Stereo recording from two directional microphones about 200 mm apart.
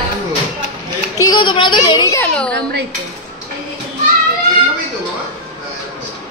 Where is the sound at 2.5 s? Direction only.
60° right (ahead or behind).